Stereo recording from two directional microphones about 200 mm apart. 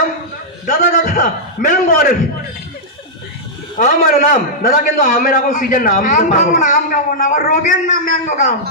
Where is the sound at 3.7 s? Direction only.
40° left (ahead or behind).